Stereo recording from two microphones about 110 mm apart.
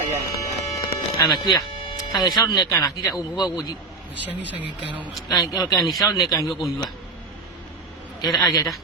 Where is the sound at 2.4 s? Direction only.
35° left (ahead or behind).